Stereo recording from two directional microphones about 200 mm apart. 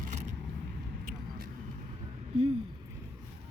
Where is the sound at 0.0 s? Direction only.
35° right (ahead or behind).